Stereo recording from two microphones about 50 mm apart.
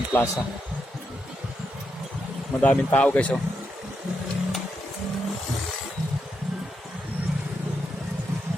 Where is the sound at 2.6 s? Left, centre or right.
Left.